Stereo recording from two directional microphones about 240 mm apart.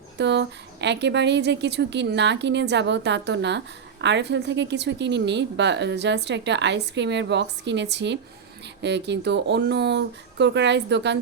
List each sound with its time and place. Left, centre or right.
0.2 s a woman's voice: right